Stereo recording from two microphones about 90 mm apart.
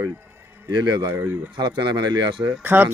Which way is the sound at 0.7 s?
55° right (ahead or behind).